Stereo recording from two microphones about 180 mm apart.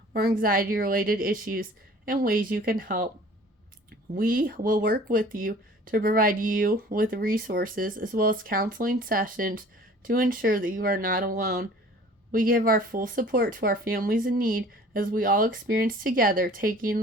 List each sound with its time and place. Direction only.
0.1 s speech: 60° right (ahead or behind)
4.1 s speech: 50° right (ahead or behind)